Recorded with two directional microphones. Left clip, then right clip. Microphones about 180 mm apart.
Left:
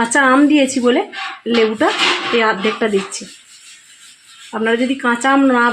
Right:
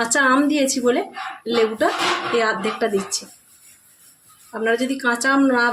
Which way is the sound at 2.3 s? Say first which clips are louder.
Left 5 dB; 25° left (ahead or behind).